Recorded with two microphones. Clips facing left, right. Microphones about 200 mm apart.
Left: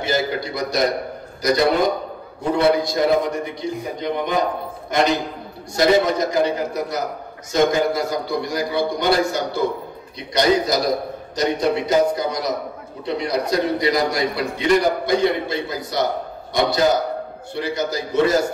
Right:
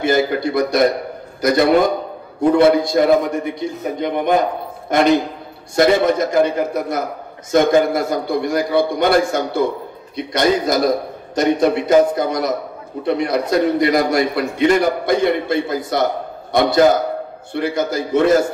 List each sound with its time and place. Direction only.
0.0 s a man's voice: 55° right (ahead or behind)
2.5 s a man's voice: 50° right (ahead or behind)
5.8 s a man's voice: 55° right (ahead or behind)